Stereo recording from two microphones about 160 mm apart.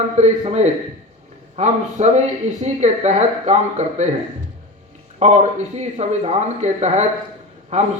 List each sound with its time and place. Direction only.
0.2 s speech: 45° right (ahead or behind)
5.2 s speech: 45° right (ahead or behind)